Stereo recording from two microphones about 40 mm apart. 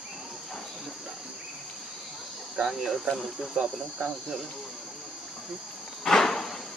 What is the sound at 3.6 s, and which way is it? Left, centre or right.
Cricket, right.